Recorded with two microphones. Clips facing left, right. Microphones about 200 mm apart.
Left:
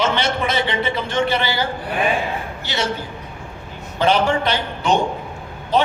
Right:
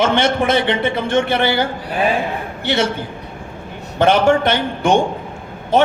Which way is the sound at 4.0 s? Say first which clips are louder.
Right 4 dB; 50° right (ahead or behind).